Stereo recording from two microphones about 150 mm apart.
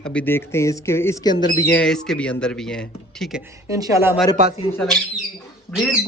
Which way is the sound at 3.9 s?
15° right (ahead or behind).